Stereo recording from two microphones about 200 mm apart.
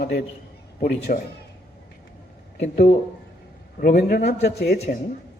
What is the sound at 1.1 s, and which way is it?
Speech, 40° left (ahead or behind).